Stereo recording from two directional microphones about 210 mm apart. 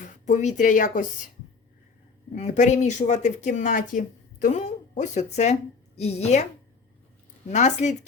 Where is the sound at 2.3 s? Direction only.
35° left (ahead or behind).